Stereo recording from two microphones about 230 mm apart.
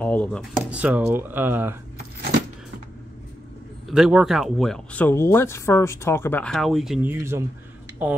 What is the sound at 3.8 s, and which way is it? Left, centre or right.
Speech, centre.